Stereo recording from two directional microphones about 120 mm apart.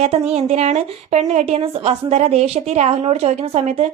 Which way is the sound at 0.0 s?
60° right (ahead or behind).